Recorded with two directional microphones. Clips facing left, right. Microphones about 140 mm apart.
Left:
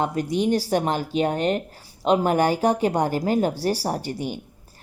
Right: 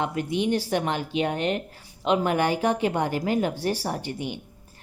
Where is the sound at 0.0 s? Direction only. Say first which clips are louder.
Left 3 dB; 40° left (ahead or behind).